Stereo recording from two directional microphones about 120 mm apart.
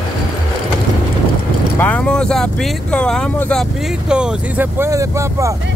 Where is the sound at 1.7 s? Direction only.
10° left (ahead or behind).